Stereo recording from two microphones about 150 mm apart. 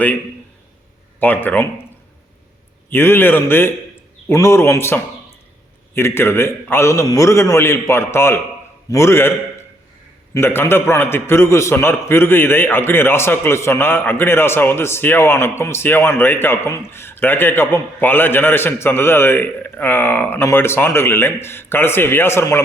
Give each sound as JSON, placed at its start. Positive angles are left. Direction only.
{"t": 1.2, "sound": "a man's voice", "side_deg": 10}
{"t": 2.9, "sound": "a man's voice", "side_deg": 15}